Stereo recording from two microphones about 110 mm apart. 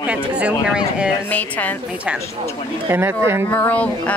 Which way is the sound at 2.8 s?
20° right (ahead or behind).